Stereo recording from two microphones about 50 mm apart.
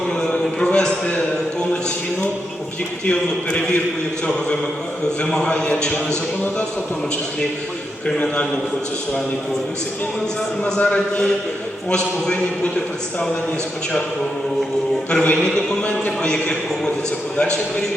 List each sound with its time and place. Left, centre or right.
0.2 s a sound: centre
3.1 s speech: centre
5.3 s a man's voice: centre
8.0 s speech: left
10.8 s speech: left
15.1 s speech: left
16.3 s a man's voice: centre